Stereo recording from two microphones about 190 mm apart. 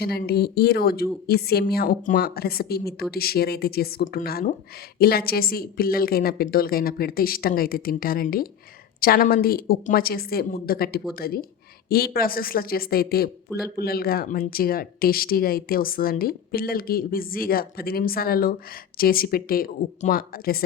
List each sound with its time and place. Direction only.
0.0 s speech: 55° left (ahead or behind)